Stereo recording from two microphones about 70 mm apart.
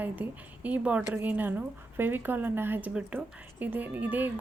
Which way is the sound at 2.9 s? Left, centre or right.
Centre.